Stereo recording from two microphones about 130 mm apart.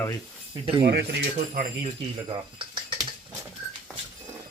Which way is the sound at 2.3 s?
40° right (ahead or behind).